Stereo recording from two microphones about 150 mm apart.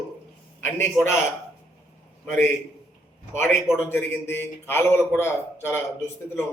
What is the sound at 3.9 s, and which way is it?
A man's voice, 15° left (ahead or behind).